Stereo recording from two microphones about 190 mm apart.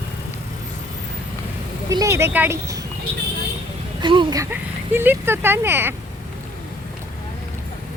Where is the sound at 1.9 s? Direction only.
15° right (ahead or behind).